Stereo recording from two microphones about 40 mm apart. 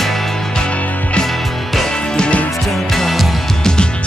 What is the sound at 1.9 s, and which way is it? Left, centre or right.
Music, left.